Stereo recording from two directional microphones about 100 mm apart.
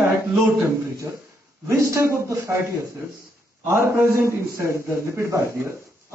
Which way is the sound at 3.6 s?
25° right (ahead or behind).